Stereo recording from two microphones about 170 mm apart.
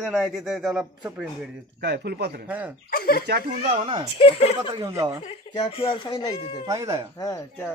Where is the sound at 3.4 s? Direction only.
35° right (ahead or behind).